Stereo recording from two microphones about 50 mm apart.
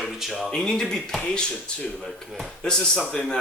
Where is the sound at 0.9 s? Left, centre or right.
Centre.